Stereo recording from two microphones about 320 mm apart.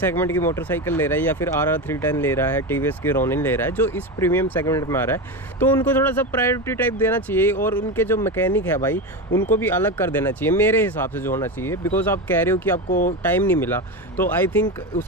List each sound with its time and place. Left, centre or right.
0.0 s speech: centre
12.9 s speech: left
13.2 s speech: centre